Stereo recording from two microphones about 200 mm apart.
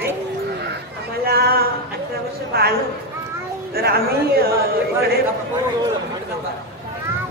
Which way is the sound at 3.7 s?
50° right (ahead or behind).